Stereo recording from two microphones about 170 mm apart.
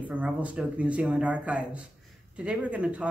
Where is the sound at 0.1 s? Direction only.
Centre (ahead or behind).